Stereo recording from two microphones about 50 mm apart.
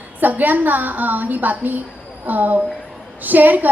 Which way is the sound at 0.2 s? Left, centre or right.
Right.